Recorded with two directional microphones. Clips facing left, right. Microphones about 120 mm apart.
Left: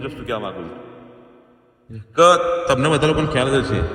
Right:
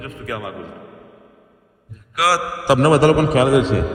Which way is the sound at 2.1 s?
30° left (ahead or behind).